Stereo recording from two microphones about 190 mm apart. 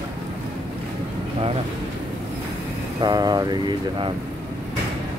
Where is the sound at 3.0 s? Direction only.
20° right (ahead or behind).